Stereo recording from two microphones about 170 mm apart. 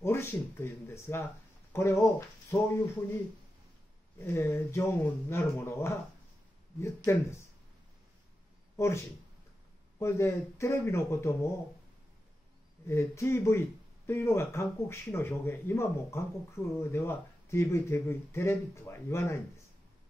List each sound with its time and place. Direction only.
0.0 s a sound: 15° left (ahead or behind)
1.7 s speech: 15° left (ahead or behind)
4.2 s speech: 15° left (ahead or behind)
8.7 s speech: 15° left (ahead or behind)
12.8 s speech: 15° left (ahead or behind)